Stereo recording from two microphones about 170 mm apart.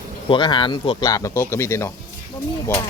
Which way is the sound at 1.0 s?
20° left (ahead or behind).